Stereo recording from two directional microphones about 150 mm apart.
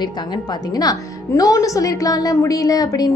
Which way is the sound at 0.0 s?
30° left (ahead or behind).